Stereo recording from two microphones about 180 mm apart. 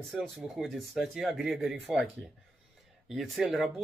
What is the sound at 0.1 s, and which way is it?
Speech, centre (ahead or behind).